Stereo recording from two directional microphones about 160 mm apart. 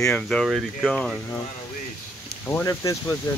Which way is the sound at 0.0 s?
5° left (ahead or behind).